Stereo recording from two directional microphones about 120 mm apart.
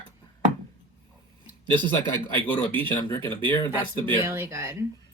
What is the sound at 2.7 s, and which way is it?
Speech, 15° left (ahead or behind).